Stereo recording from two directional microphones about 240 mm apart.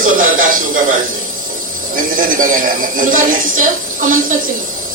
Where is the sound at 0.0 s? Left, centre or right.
Right.